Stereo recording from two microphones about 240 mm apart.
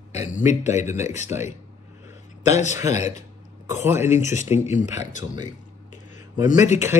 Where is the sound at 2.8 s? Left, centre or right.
Centre.